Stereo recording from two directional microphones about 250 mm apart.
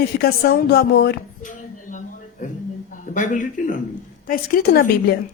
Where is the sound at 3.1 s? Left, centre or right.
Left.